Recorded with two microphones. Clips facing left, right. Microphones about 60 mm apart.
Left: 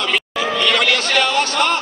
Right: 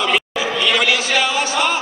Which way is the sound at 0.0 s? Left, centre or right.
Centre.